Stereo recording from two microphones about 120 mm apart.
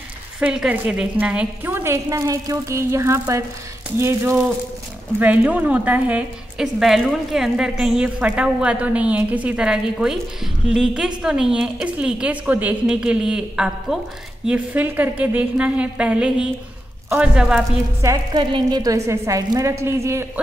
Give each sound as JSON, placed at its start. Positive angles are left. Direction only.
{"t": 0.4, "sound": "a woman's voice", "side_deg": -10}
{"t": 18.0, "sound": "a woman's voice", "side_deg": -30}